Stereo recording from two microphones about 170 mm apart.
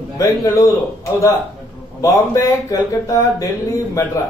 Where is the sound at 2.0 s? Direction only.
20° left (ahead or behind).